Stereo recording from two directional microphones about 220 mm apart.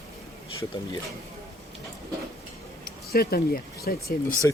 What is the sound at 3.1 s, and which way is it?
Speech, 45° left (ahead or behind).